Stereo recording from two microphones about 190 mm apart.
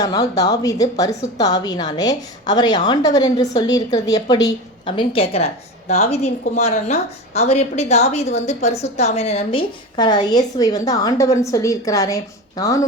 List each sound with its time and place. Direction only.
0.0 s a woman's voice: 20° left (ahead or behind)